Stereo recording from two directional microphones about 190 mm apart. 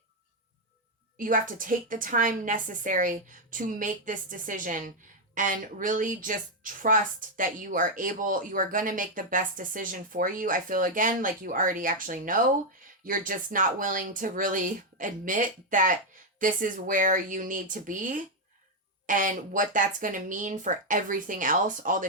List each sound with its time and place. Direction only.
1.2 s speech: 45° right (ahead or behind)